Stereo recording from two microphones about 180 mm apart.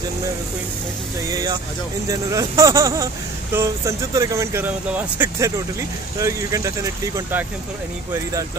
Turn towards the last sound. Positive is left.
turn(degrees=-15)  # may be behind; listen again after turning